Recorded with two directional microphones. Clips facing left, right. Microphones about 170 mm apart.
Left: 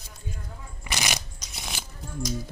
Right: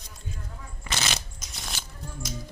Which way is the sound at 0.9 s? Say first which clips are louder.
Left 1 dB; 15° left (ahead or behind).